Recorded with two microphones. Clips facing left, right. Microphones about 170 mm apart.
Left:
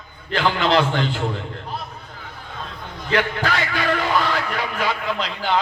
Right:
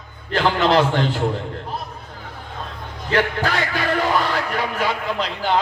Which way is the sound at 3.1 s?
40° right (ahead or behind).